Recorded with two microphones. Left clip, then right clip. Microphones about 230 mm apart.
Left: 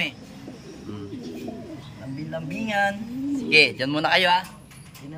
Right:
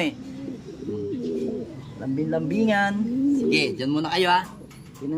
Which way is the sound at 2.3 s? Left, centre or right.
Centre.